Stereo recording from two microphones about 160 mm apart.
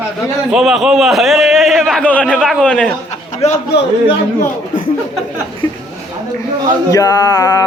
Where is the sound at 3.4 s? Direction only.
45° left (ahead or behind).